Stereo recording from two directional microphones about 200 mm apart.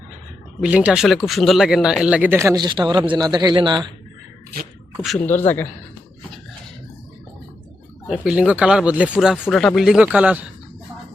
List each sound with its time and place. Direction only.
0.6 s a man's voice: 5° right (ahead or behind); by 3.9 s 20° right (ahead or behind)
4.9 s speech: 5° left (ahead or behind)
8.0 s speech: 5° right (ahead or behind)